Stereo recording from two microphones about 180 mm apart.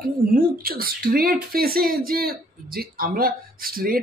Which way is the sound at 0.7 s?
55° right (ahead or behind).